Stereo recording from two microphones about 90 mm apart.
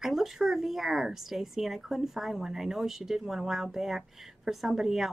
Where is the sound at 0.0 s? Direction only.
Centre (ahead or behind).